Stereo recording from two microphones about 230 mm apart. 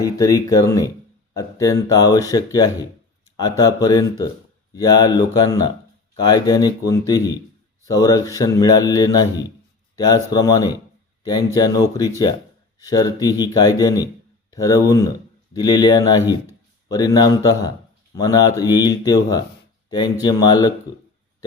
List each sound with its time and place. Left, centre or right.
0.0 s speech: centre